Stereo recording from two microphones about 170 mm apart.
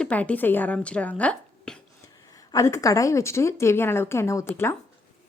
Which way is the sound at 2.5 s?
15° left (ahead or behind).